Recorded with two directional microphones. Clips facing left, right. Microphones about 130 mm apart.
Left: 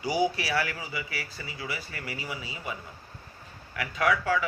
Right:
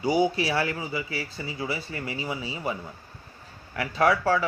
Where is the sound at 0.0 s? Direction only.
25° right (ahead or behind).